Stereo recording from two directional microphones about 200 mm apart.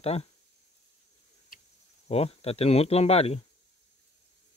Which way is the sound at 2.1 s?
30° left (ahead or behind).